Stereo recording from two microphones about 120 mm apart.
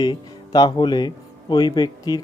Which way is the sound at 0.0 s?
35° left (ahead or behind).